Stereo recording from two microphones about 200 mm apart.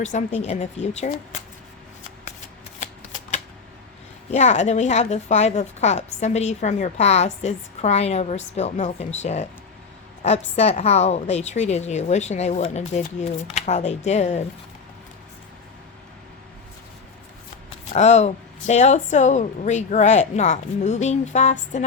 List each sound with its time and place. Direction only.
0.0 s a woman's voice: 35° left (ahead or behind)
4.3 s a woman's voice: 35° left (ahead or behind)
17.9 s a woman's voice: 35° left (ahead or behind)